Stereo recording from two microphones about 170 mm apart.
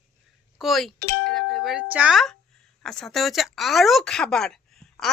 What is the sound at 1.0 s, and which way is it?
Speech, 70° left (ahead or behind).